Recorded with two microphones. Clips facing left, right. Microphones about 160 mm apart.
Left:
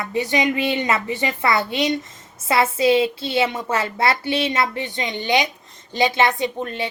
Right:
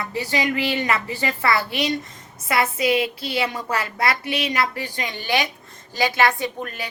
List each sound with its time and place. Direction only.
0.0 s a woman's voice: 20° left (ahead or behind)